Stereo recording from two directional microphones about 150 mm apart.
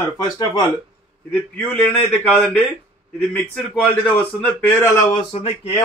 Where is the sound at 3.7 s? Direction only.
10° left (ahead or behind).